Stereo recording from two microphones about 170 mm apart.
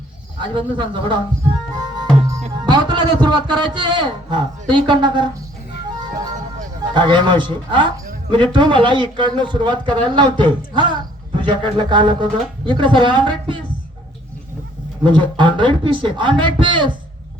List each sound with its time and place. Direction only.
0.5 s a man's voice: 30° right (ahead or behind)
2.6 s a man's voice: 25° right (ahead or behind)
6.9 s a man's voice: 25° right (ahead or behind)
15.0 s a man's voice: 30° right (ahead or behind)